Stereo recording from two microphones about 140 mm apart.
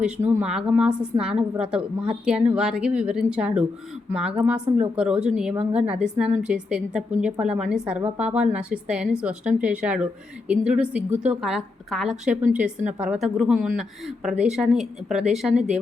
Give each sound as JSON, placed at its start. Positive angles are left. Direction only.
{"t": 0.2, "sound": "a woman's voice", "side_deg": -15}
{"t": 0.4, "sound": "a woman's voice", "side_deg": -5}